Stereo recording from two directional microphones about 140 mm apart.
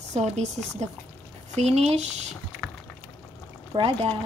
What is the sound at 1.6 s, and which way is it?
Speech, 50° right (ahead or behind).